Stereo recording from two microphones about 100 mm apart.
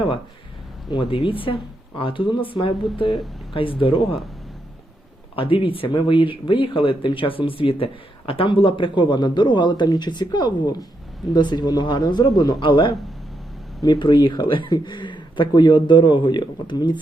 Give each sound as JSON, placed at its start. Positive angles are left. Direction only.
{"t": 0.9, "sound": "speech", "side_deg": 55}
{"t": 5.4, "sound": "speech", "side_deg": 60}